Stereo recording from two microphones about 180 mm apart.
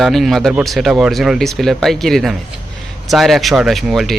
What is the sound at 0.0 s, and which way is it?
Speech, centre (ahead or behind).